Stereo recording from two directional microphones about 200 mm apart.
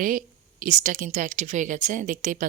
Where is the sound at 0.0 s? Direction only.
40° right (ahead or behind).